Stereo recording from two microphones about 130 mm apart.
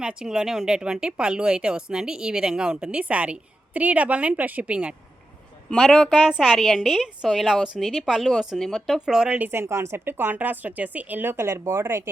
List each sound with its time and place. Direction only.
0.0 s a woman's voice: 5° right (ahead or behind)